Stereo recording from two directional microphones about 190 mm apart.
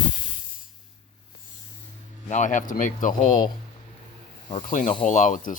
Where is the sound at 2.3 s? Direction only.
40° left (ahead or behind).